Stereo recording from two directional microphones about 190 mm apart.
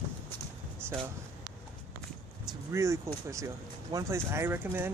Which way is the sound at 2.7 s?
15° right (ahead or behind).